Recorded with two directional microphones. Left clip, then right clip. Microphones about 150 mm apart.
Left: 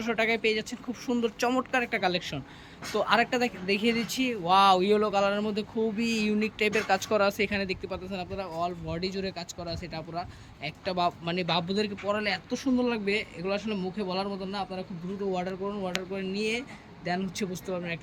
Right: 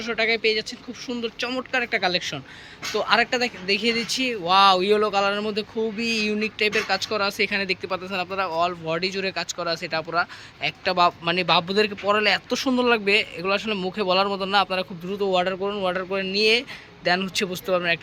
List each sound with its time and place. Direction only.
0.0 s speech: 20° left (ahead or behind)